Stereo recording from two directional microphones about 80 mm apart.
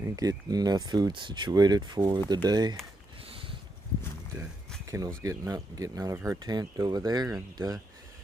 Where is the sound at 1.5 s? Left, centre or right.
Right.